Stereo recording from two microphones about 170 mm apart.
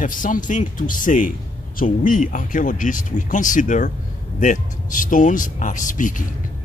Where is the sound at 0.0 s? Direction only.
50° left (ahead or behind).